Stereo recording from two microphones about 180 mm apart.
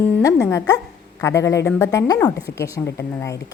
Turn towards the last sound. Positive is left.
turn(degrees=15)  # may be behind; listen again after turning